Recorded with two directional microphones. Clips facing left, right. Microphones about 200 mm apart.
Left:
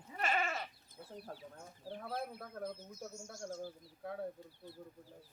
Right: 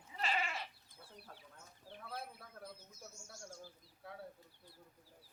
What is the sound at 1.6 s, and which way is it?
Speech, 60° left (ahead or behind).